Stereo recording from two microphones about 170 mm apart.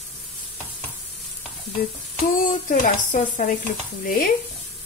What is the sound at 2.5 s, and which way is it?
Speech, 50° left (ahead or behind).